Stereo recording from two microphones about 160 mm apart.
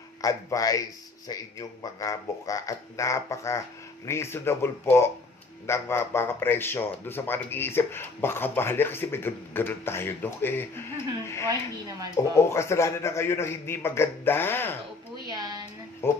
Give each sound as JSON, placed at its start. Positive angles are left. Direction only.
{"t": 0.2, "sound": "speech", "side_deg": 20}
{"t": 15.2, "sound": "a sound", "side_deg": -25}
{"t": 16.0, "sound": "speech", "side_deg": 15}